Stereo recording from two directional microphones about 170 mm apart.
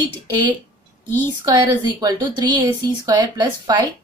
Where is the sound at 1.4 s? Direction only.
20° right (ahead or behind).